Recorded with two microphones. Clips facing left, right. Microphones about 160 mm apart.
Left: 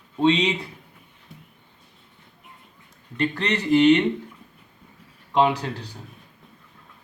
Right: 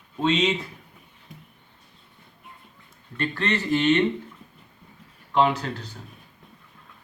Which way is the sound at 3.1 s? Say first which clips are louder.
Left 2 dB; 20° left (ahead or behind).